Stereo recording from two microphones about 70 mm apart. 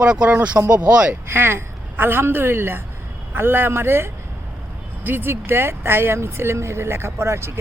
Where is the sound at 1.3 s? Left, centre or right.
Right.